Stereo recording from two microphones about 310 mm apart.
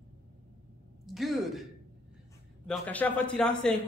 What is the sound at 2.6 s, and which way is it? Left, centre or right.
A woman's voice, centre.